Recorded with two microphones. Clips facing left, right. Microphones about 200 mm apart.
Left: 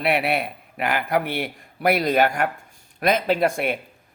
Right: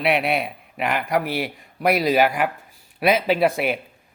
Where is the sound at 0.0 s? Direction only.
Centre (ahead or behind).